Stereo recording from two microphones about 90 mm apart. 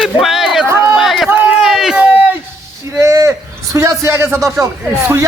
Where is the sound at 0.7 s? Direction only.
30° right (ahead or behind).